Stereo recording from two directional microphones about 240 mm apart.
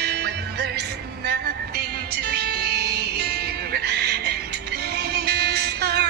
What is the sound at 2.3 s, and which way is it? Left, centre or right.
Music, right.